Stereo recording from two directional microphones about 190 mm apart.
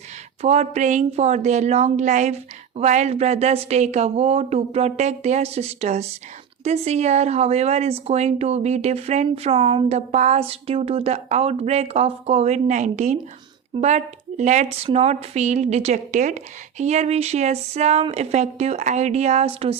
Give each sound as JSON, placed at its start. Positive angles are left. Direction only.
{"t": 0.4, "sound": "a woman's voice", "side_deg": -35}